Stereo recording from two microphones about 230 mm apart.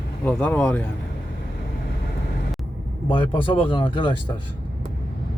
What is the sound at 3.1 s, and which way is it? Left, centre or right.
Speech, left.